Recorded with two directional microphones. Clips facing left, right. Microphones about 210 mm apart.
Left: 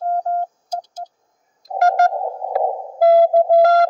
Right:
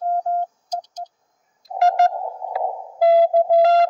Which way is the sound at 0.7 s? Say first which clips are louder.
Left 1 dB; 10° left (ahead or behind).